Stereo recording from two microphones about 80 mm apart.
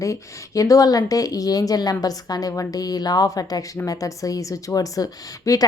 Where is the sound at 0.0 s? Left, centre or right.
Left.